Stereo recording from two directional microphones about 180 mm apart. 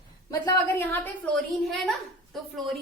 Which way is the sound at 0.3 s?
20° left (ahead or behind).